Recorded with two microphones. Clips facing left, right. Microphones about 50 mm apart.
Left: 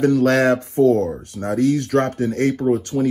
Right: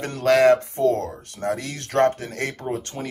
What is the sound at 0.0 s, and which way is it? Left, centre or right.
Speech, right.